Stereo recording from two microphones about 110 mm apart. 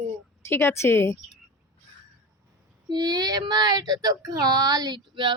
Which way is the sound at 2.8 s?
40° right (ahead or behind).